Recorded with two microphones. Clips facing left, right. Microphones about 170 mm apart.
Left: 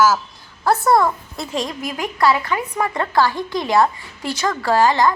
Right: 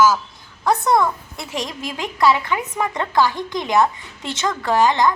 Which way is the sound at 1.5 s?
25° left (ahead or behind).